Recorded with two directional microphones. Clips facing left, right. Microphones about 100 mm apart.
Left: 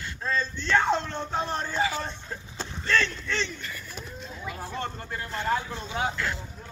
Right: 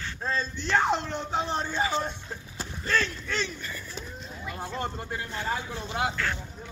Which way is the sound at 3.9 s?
Centre (ahead or behind).